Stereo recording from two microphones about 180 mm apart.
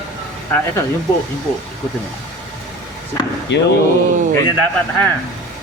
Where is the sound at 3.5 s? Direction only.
75° left (ahead or behind).